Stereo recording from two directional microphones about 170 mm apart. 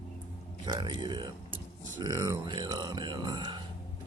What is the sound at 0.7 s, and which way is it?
Speech, 25° right (ahead or behind).